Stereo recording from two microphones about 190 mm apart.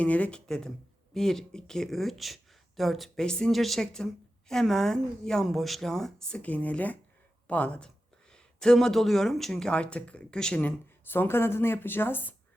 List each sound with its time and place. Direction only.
0.0 s speech: 5° left (ahead or behind)